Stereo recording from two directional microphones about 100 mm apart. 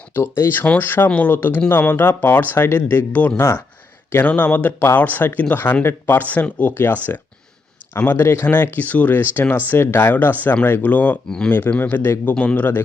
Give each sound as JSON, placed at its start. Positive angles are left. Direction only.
{"t": 0.1, "sound": "speech", "side_deg": 25}